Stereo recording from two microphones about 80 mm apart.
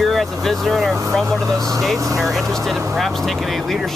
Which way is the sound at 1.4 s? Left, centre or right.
Right.